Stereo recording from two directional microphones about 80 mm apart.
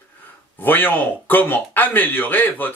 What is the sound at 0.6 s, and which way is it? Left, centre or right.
A man's voice, left.